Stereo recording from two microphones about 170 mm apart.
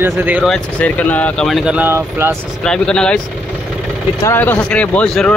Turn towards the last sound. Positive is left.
turn(degrees=5)  # may be behind; listen again after turning